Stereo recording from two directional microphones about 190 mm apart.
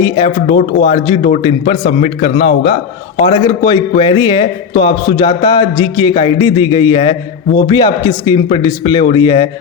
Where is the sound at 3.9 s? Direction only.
25° left (ahead or behind).